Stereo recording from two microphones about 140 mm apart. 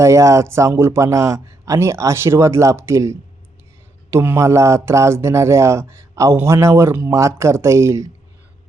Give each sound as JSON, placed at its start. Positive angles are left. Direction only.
{"t": 0.0, "sound": "a man's voice", "side_deg": -20}